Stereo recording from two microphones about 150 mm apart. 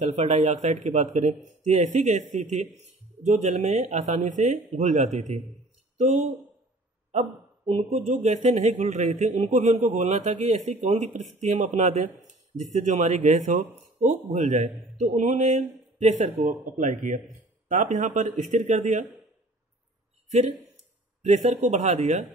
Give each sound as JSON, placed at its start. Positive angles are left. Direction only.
{"t": 0.0, "sound": "a man's voice", "side_deg": -50}
{"t": 7.1, "sound": "a sound", "side_deg": -50}
{"t": 8.1, "sound": "a man's voice", "side_deg": -55}
{"t": 20.2, "sound": "a man's voice", "side_deg": -50}